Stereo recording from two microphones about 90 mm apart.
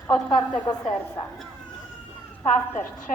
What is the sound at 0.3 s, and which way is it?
Speech, 55° left (ahead or behind).